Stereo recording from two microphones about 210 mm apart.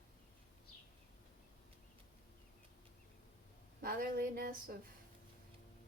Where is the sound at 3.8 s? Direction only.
45° right (ahead or behind).